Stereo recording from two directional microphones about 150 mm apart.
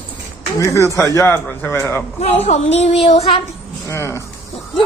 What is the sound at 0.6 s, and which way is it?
A man's voice, 20° left (ahead or behind).